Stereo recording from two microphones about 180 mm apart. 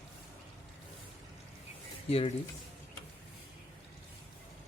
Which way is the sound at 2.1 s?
35° left (ahead or behind).